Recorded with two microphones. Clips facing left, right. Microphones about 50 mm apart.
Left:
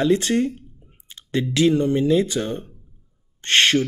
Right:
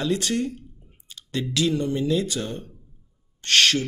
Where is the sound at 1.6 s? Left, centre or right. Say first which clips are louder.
Left 6 dB; left.